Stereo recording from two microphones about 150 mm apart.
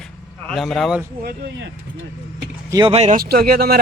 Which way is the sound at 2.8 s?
45° right (ahead or behind).